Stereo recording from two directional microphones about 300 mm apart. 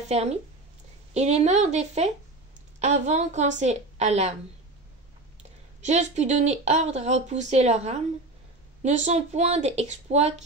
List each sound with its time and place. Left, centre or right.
0.1 s speech: right
5.8 s speech: right